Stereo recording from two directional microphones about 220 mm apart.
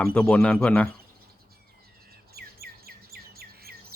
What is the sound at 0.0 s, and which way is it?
Speech, 5° left (ahead or behind).